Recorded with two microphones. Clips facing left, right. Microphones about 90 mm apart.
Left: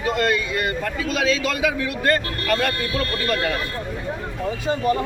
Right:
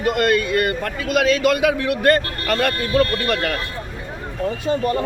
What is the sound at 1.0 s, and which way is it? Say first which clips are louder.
A man's voice: right 6 dB; 60° right (ahead or behind).